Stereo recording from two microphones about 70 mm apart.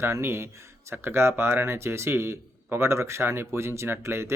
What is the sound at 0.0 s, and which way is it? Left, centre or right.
Speech, right.